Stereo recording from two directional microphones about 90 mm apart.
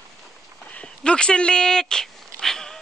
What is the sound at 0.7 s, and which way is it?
Dog, 10° left (ahead or behind).